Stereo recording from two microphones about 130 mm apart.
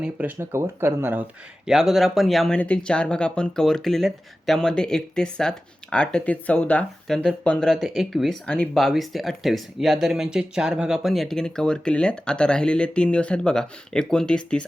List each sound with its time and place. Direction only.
0.0 s speech: 10° right (ahead or behind)
1.7 s speech: 5° right (ahead or behind)